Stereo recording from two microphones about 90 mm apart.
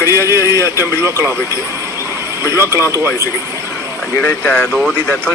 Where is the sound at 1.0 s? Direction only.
30° right (ahead or behind).